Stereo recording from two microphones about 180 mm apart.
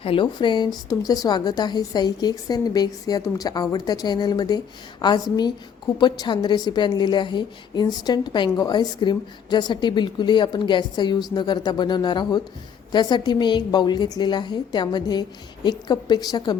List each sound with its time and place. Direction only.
0.0 s speech: 30° left (ahead or behind)